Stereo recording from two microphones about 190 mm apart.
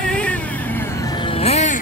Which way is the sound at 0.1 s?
5° left (ahead or behind).